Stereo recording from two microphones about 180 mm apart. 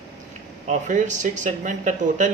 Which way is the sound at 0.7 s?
40° right (ahead or behind).